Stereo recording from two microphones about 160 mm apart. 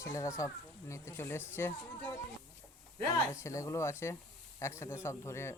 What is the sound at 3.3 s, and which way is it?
A man's voice, 20° left (ahead or behind).